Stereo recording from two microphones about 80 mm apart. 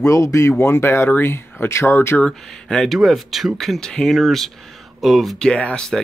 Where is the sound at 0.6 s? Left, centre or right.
Left.